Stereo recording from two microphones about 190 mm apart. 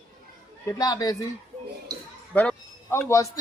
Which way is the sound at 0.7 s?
20° left (ahead or behind).